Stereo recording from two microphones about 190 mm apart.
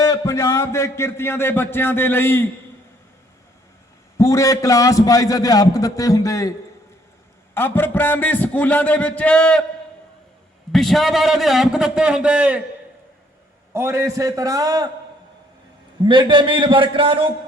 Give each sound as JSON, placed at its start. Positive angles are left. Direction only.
{"t": 0.0, "sound": "a man's voice", "side_deg": 15}
{"t": 4.2, "sound": "a man's voice", "side_deg": 15}
{"t": 7.5, "sound": "a man's voice", "side_deg": 10}
{"t": 10.7, "sound": "a man's voice", "side_deg": 0}
{"t": 13.7, "sound": "a man's voice", "side_deg": -15}
{"t": 16.0, "sound": "a man's voice", "side_deg": -25}